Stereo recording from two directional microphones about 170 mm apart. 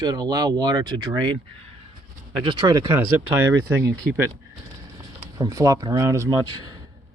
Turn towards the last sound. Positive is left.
turn(degrees=-20)  # may be behind; listen again after turning